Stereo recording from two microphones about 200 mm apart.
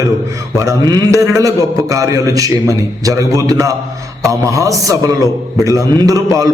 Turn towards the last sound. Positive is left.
turn(degrees=-15)  # may be behind; listen again after turning